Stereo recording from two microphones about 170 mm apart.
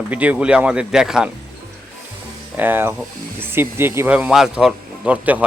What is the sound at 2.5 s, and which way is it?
Speech, 10° right (ahead or behind).